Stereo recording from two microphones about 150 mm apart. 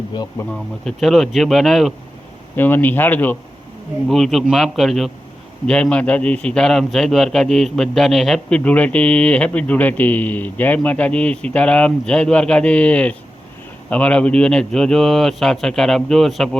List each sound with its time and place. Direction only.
0.5 s a man's voice: centre (ahead or behind)
2.6 s a man's voice: 15° left (ahead or behind)
4.1 s a man's voice: centre (ahead or behind)